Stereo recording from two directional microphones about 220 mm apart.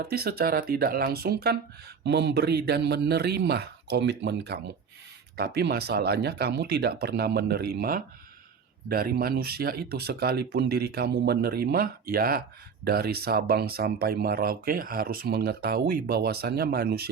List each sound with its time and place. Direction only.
0.0 s speech: 45° right (ahead or behind)